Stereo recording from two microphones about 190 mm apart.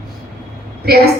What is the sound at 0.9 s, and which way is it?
Speech, 55° right (ahead or behind).